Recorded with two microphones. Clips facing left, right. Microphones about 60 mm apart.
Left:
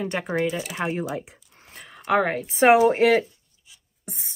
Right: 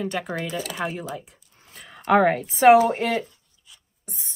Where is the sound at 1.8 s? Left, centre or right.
Centre.